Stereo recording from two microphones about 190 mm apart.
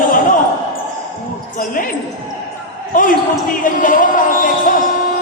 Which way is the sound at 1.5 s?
45° left (ahead or behind).